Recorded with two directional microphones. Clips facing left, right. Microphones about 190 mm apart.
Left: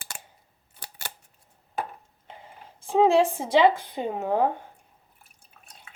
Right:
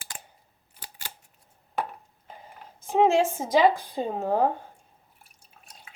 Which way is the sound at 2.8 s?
35° left (ahead or behind).